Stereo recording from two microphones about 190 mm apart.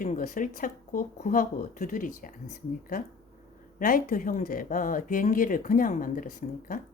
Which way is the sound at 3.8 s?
50° left (ahead or behind).